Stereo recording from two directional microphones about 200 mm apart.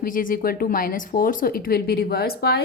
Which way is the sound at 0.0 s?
45° left (ahead or behind).